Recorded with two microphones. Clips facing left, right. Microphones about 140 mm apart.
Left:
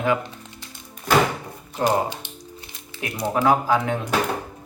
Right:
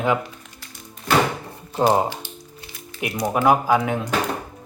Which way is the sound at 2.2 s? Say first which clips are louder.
Right 2 dB; 20° left (ahead or behind).